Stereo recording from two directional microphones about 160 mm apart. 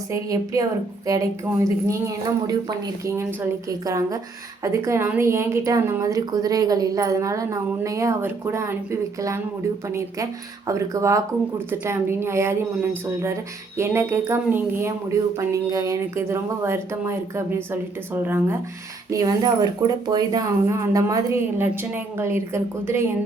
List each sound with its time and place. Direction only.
0.1 s a woman's voice: 20° right (ahead or behind)
19.1 s a woman's voice: 25° right (ahead or behind)